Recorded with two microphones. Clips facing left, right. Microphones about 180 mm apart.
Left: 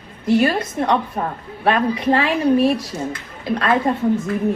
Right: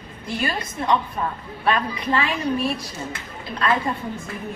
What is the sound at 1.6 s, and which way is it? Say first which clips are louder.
Speech: left 6 dB; 65° left (ahead or behind).